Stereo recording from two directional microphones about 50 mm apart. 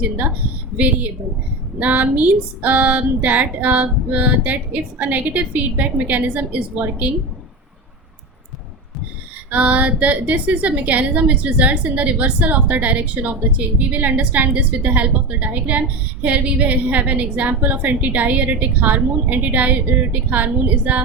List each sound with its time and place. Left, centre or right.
0.8 s speech: right
9.5 s speech: right